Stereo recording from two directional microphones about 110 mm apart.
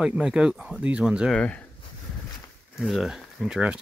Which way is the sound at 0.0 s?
10° right (ahead or behind).